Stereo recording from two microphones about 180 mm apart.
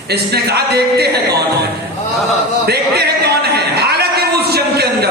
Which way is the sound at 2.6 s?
60° right (ahead or behind).